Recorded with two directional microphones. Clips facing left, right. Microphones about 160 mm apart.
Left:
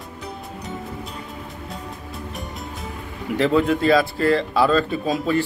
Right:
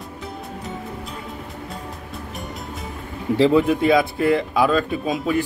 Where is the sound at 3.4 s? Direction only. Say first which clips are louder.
Right 2 dB; 20° right (ahead or behind).